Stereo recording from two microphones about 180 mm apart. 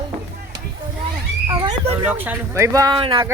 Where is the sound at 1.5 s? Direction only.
25° right (ahead or behind).